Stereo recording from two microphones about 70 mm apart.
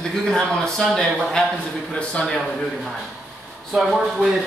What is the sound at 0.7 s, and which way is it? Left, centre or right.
A man's voice, centre.